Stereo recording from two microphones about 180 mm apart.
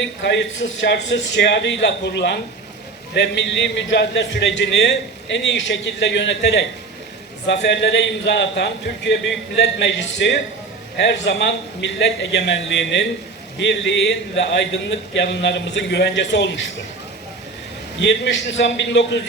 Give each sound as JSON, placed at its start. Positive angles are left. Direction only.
{"t": 0.0, "sound": "a man's voice", "side_deg": 80}
{"t": 18.0, "sound": "a man's voice", "side_deg": 75}